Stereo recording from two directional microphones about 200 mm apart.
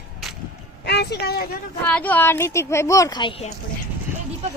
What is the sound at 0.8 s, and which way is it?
Speech, 55° left (ahead or behind).